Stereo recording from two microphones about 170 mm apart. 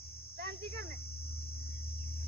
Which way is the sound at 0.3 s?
65° right (ahead or behind).